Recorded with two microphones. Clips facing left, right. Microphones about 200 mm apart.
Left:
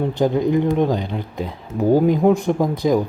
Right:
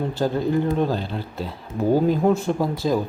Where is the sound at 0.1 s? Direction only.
15° left (ahead or behind).